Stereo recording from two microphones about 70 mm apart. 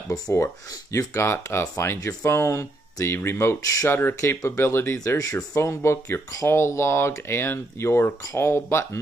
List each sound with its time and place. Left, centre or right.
0.9 s speech: left
3.1 s speech: left
5.0 s speech: left